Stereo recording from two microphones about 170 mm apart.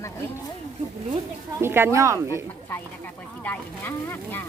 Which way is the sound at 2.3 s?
15° left (ahead or behind).